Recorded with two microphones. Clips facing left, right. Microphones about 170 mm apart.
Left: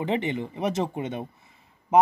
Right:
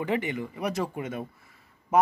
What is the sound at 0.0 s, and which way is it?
Speech, 25° left (ahead or behind).